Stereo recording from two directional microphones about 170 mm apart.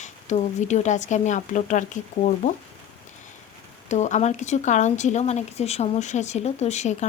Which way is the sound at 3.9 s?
45° left (ahead or behind).